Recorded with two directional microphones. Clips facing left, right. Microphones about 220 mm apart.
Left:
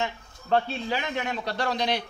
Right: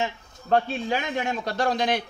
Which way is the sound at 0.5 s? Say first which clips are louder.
Right 2 dB; 45° right (ahead or behind).